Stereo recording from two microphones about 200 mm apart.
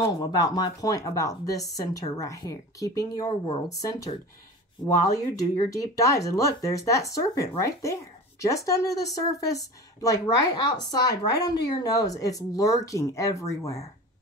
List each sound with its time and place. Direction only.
0.0 s speech: 20° left (ahead or behind)
5.3 s speech: 15° left (ahead or behind)